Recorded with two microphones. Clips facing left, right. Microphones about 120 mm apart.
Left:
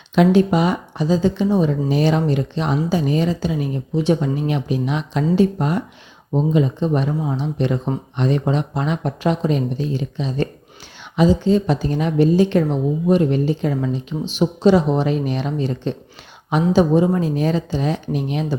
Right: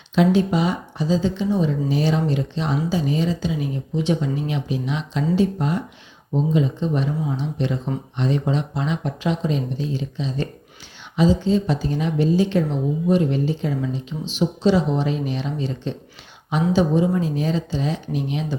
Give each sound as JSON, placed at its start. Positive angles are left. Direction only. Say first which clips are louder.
{"t": 0.2, "sound": "speech", "louder": "left 3 dB", "side_deg": 60}